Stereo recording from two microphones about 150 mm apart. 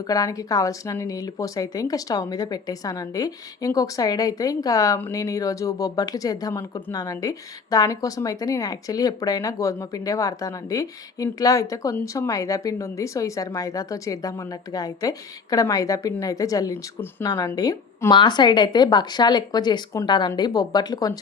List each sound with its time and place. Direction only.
0.1 s speech: 25° left (ahead or behind)